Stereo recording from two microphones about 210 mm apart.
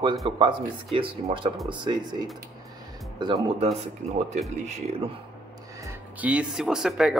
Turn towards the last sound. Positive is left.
turn(degrees=0)  # may be behind; listen again after turning